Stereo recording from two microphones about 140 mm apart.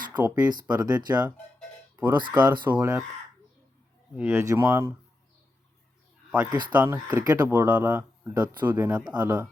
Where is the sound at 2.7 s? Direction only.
20° right (ahead or behind).